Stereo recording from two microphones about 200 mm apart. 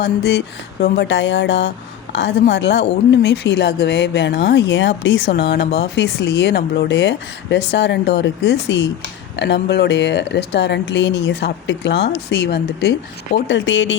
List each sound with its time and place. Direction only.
0.0 s speech: 55° left (ahead or behind)
13.5 s speech: 65° left (ahead or behind)